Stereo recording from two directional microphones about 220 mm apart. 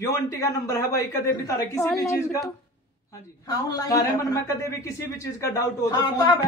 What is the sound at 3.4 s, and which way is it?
Speech, 15° left (ahead or behind).